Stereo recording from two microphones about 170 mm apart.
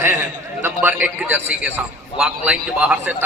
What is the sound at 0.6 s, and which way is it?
A man's voice, 10° right (ahead or behind).